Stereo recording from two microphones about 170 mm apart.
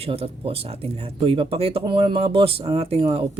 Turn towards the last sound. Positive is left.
turn(degrees=-35)  # may be behind; listen again after turning